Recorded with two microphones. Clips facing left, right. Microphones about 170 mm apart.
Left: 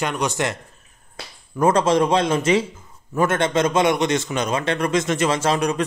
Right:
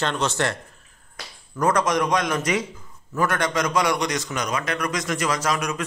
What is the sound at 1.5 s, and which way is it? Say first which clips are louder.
A man's voice: left 4 dB; 25° left (ahead or behind).